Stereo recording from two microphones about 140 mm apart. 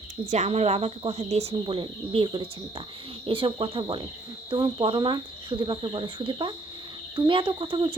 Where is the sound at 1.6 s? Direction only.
35° right (ahead or behind).